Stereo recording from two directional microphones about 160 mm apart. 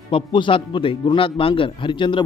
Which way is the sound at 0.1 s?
35° left (ahead or behind).